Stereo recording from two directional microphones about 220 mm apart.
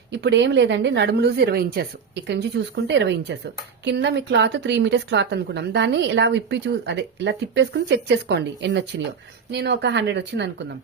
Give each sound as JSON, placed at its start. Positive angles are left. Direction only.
{"t": 0.1, "sound": "a woman's voice", "side_deg": -50}